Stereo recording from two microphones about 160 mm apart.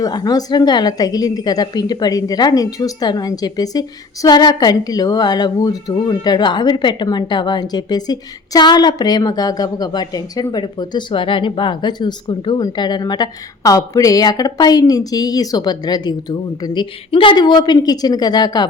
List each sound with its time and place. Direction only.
0.0 s a woman's voice: 25° left (ahead or behind)